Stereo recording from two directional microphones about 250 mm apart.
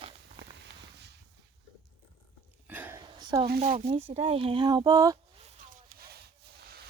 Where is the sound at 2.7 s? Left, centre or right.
Centre.